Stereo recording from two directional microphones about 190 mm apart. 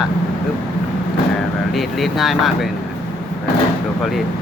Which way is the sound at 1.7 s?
Centre (ahead or behind).